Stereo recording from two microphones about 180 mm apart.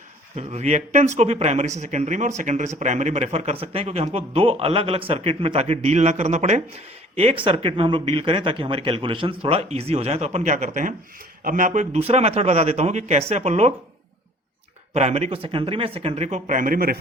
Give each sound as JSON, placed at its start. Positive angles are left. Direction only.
{"t": 0.3, "sound": "speech", "side_deg": -35}
{"t": 14.9, "sound": "speech", "side_deg": -35}